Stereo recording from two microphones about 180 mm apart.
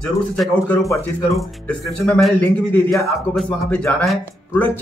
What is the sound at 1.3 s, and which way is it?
Speech, centre (ahead or behind).